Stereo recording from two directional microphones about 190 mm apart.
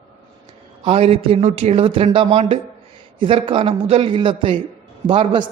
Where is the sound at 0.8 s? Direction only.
30° right (ahead or behind).